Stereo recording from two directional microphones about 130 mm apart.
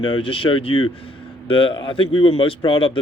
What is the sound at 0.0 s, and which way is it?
Speech, 40° left (ahead or behind).